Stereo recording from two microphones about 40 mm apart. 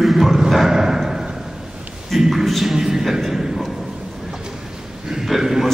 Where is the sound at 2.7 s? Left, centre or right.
Centre.